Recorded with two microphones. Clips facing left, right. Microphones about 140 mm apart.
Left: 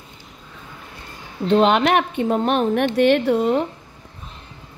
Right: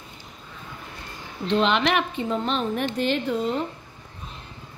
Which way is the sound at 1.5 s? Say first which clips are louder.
Left 6 dB; 45° left (ahead or behind).